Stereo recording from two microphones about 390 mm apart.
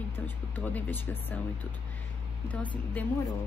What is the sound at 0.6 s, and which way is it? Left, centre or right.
A woman's voice, centre.